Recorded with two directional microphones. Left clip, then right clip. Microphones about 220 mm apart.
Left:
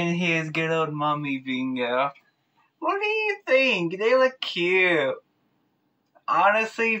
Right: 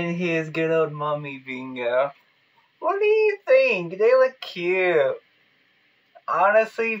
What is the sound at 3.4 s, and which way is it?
Speech, 30° right (ahead or behind).